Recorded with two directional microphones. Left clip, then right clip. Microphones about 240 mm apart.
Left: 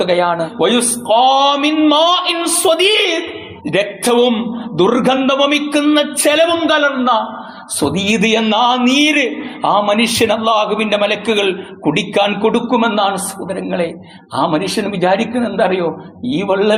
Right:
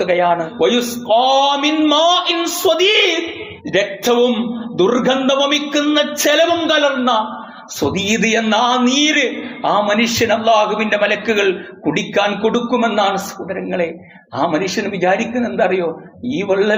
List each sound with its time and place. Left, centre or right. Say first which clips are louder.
0.0 s a man's voice: left 1 dB; left